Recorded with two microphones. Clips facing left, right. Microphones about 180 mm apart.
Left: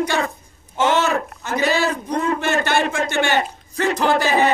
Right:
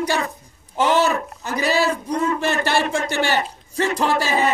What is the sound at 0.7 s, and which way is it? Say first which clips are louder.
A man's voice: even; 35° right (ahead or behind).